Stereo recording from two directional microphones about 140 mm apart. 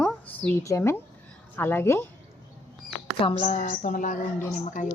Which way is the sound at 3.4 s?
60° left (ahead or behind).